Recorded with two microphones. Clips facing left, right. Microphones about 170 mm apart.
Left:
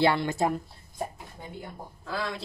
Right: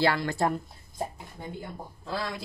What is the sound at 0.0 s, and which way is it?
Speech, 25° left (ahead or behind).